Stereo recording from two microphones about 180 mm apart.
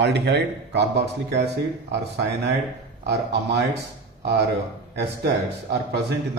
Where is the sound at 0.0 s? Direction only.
70° right (ahead or behind).